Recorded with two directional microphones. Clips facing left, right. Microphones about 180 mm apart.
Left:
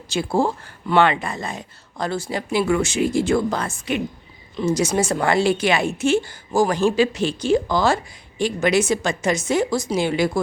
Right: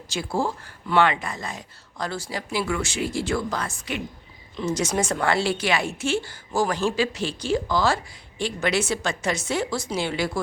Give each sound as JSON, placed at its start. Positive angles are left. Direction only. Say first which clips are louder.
{"t": 0.1, "sound": "a woman's voice", "louder": "left 5 dB", "side_deg": 25}
{"t": 4.5, "sound": "a woman's voice", "louder": "left 5 dB", "side_deg": 10}